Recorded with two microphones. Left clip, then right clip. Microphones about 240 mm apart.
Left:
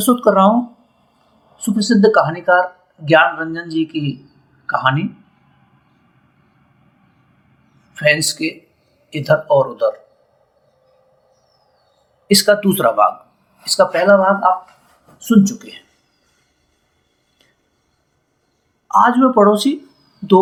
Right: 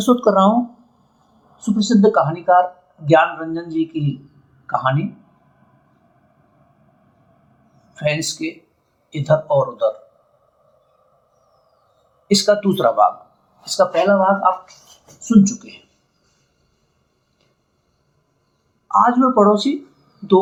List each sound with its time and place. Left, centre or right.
0.0 s speech: left
1.5 s speech: left
7.9 s speech: left
12.3 s speech: left
19.0 s speech: left